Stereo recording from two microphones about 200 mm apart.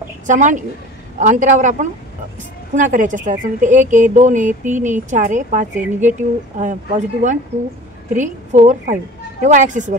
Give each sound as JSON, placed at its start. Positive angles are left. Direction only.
{"t": 0.3, "sound": "a woman's voice", "side_deg": -40}
{"t": 5.8, "sound": "speech", "side_deg": -10}
{"t": 6.6, "sound": "a woman's voice", "side_deg": -40}
{"t": 8.5, "sound": "a woman's voice", "side_deg": -35}